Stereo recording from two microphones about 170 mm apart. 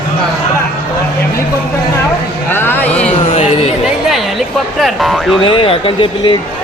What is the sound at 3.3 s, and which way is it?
Speech, 35° left (ahead or behind).